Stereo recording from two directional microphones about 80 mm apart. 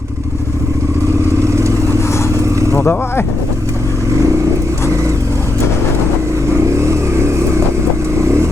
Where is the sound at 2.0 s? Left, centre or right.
Left.